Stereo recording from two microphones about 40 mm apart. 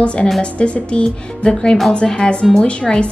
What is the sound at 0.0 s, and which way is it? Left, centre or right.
A woman's voice, left.